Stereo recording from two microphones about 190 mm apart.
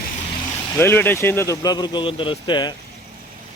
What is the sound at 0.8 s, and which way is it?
Speech, 10° left (ahead or behind).